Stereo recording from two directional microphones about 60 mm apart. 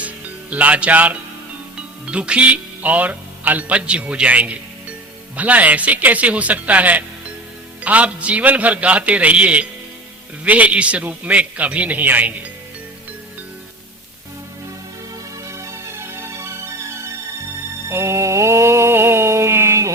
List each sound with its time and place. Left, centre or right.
0.5 s a man's voice: right
15.5 s music: right
17.8 s mantra: right